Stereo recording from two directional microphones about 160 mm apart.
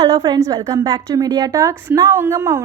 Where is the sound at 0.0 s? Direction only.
20° right (ahead or behind).